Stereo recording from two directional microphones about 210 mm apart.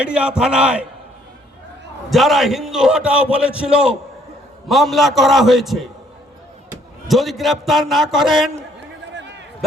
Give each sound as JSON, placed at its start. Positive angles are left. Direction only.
{"t": 0.0, "sound": "a man's voice", "side_deg": -5}
{"t": 2.0, "sound": "a man's voice", "side_deg": 0}
{"t": 7.1, "sound": "a man's voice", "side_deg": 0}
{"t": 9.1, "sound": "a sound", "side_deg": -55}